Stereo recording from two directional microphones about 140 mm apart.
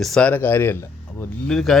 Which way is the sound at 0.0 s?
5° left (ahead or behind).